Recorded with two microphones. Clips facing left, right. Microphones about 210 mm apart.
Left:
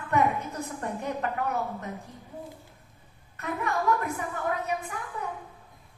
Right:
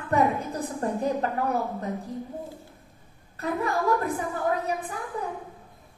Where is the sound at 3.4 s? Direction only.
35° right (ahead or behind).